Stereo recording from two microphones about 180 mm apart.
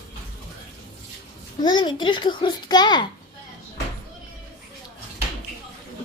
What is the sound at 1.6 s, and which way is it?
A child's voice, 25° left (ahead or behind).